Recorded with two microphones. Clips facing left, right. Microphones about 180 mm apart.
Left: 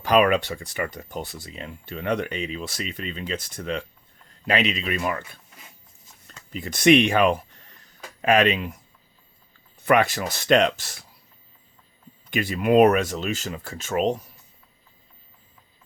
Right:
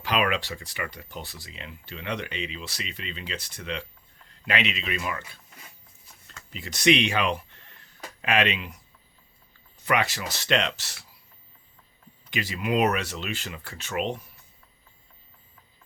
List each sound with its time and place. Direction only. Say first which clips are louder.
0.0 s speech: left 7 dB; 50° left (ahead or behind)
6.5 s speech: left 6 dB; 50° left (ahead or behind)
9.8 s speech: left 6 dB; 50° left (ahead or behind)
12.3 s speech: left 7 dB; 55° left (ahead or behind)